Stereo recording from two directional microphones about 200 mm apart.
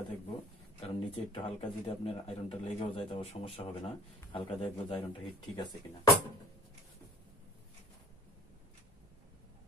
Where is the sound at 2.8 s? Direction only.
25° left (ahead or behind).